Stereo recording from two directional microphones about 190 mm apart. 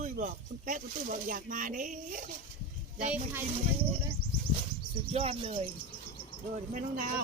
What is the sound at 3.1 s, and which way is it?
Speech, 10° right (ahead or behind).